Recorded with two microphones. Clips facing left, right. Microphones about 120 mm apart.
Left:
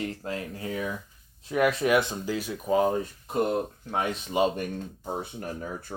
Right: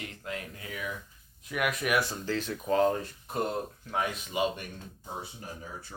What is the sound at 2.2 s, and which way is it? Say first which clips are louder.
Speech: left 2 dB; 10° left (ahead or behind).